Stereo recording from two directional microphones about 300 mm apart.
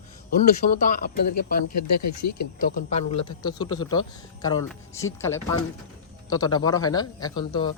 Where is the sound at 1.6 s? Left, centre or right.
Left.